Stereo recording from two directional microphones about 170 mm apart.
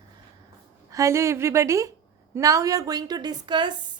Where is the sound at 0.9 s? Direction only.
20° right (ahead or behind).